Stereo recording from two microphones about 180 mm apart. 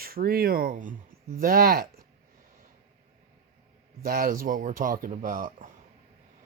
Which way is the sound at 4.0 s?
55° right (ahead or behind).